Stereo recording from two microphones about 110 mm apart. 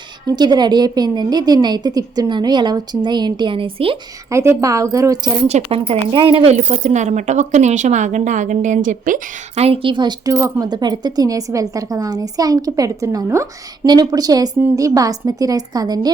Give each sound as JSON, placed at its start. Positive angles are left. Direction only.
{"t": 0.3, "sound": "a woman's voice", "side_deg": -40}
{"t": 4.3, "sound": "a woman's voice", "side_deg": -25}
{"t": 5.5, "sound": "speech", "side_deg": -70}
{"t": 9.6, "sound": "a woman's voice", "side_deg": -60}
{"t": 13.8, "sound": "a woman's voice", "side_deg": -40}